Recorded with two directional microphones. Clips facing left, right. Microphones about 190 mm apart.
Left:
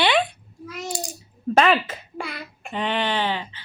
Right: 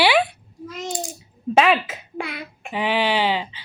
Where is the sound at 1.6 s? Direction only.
5° right (ahead or behind).